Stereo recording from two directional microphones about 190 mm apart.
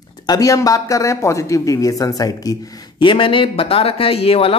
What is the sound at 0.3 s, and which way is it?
A man's voice, 20° left (ahead or behind).